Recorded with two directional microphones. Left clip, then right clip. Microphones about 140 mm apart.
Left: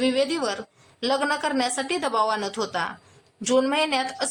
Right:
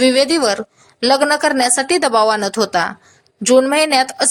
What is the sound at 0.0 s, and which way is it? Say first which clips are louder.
A woman's voice: right 10 dB; 40° right (ahead or behind).